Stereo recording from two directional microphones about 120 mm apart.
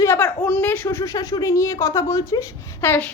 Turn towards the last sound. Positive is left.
turn(degrees=20)  # may be behind; listen again after turning